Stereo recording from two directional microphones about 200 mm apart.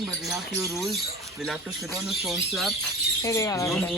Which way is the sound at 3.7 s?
5° left (ahead or behind).